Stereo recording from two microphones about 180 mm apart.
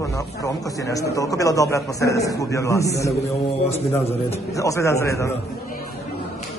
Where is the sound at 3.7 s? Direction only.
35° left (ahead or behind).